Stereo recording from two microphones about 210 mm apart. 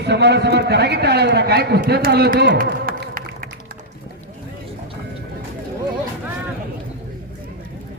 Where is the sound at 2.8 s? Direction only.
40° right (ahead or behind).